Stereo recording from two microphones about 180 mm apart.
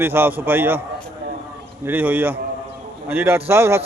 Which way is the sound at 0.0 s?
10° right (ahead or behind).